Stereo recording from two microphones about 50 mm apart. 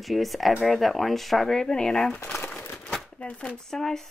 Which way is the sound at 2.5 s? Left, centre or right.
Left.